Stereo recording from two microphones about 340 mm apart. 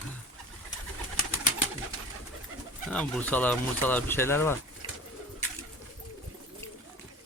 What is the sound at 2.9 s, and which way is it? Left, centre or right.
Speech, centre.